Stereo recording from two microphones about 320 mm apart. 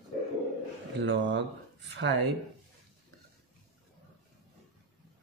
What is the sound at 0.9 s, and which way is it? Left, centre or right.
Speech, right.